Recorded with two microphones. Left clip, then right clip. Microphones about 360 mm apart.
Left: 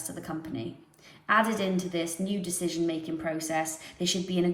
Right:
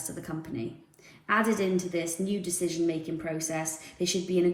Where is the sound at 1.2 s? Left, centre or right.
Centre.